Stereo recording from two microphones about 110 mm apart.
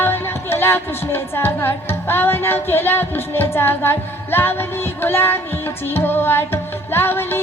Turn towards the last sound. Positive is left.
turn(degrees=20)  # may be behind; listen again after turning